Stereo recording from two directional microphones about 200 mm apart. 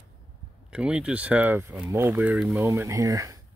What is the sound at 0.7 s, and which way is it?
Speech, 5° right (ahead or behind).